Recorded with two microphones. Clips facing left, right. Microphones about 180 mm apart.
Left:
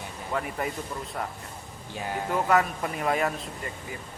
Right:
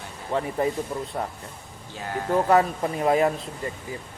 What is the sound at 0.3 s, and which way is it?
Speech, 30° right (ahead or behind).